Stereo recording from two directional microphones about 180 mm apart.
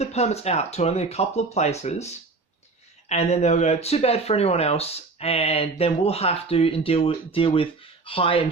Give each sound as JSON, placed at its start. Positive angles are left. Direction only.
{"t": 0.0, "sound": "speech", "side_deg": 35}